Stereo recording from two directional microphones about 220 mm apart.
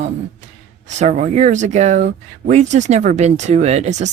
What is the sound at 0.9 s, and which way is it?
Speech, 30° right (ahead or behind).